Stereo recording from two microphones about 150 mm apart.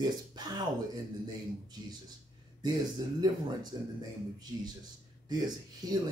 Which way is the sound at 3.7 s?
30° right (ahead or behind).